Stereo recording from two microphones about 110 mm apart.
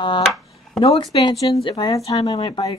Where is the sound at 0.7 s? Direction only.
55° left (ahead or behind).